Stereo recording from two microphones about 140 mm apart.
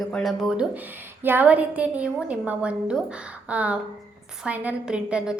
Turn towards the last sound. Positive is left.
turn(degrees=-5)  # may be behind; listen again after turning